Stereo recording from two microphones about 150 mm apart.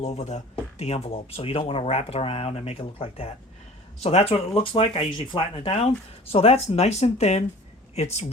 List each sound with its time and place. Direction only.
0.0 s speech: 50° left (ahead or behind)